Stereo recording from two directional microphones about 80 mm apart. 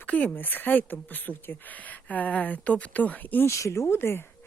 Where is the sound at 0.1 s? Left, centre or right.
Centre.